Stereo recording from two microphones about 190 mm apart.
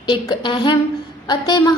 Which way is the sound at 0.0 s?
25° left (ahead or behind).